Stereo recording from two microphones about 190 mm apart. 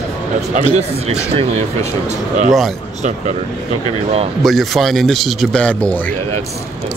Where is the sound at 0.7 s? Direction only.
35° right (ahead or behind).